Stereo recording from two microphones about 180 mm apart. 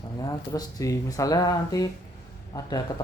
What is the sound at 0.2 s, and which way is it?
Speech, 20° left (ahead or behind).